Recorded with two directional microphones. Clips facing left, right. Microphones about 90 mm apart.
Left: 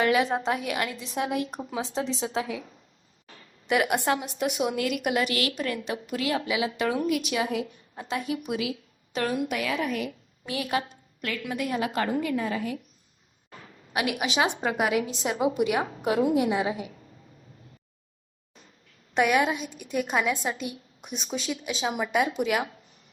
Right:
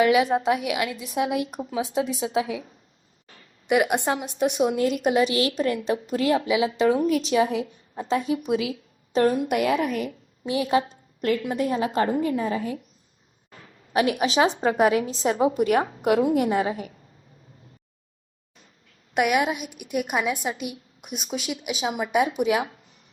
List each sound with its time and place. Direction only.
0.0 s a woman's voice: 15° right (ahead or behind)
3.7 s a woman's voice: 20° right (ahead or behind)
9.1 s a woman's voice: 35° right (ahead or behind)
10.4 s a woman's voice: 25° right (ahead or behind)
13.9 s a woman's voice: 35° right (ahead or behind)
16.0 s a woman's voice: 55° right (ahead or behind)
19.1 s a woman's voice: 10° right (ahead or behind)
22.4 s a woman's voice: 20° right (ahead or behind)